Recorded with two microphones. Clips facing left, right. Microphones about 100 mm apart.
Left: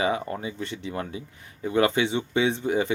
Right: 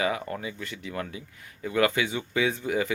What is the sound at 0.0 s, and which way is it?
Speech, 30° left (ahead or behind).